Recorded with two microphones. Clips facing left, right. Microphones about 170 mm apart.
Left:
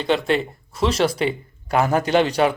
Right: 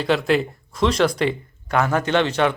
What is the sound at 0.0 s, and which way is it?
Speech, centre (ahead or behind).